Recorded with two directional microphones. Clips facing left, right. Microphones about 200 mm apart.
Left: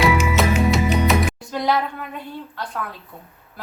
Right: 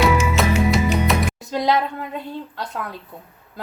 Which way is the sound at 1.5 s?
20° right (ahead or behind).